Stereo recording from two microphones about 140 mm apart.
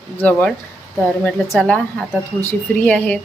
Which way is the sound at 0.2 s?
10° left (ahead or behind).